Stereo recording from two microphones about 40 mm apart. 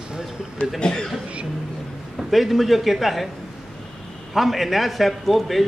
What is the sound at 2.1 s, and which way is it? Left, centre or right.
A man's voice, centre.